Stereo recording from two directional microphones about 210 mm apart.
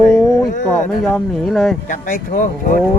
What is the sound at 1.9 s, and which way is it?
Speech, 40° left (ahead or behind).